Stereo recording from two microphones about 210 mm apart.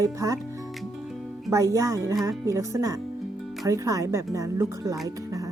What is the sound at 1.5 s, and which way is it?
Speech, 15° right (ahead or behind).